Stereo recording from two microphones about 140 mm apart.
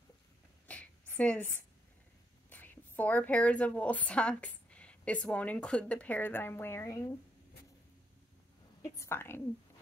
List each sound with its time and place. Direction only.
0.7 s a sound: 10° left (ahead or behind)
2.5 s a woman's voice: 15° left (ahead or behind)
8.8 s a woman's voice: 20° left (ahead or behind)